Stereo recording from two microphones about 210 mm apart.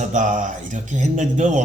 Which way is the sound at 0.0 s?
35° right (ahead or behind).